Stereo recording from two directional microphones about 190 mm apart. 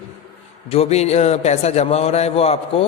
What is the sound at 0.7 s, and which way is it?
A man's voice, 35° left (ahead or behind).